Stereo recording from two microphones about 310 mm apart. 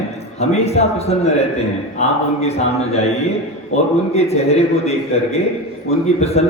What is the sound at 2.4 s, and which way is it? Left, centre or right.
A man's voice, centre.